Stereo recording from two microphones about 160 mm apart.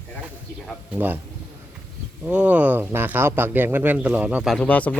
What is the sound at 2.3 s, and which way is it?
Speech, 10° right (ahead or behind).